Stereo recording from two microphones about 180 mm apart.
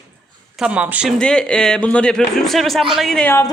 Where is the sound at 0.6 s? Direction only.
5° right (ahead or behind).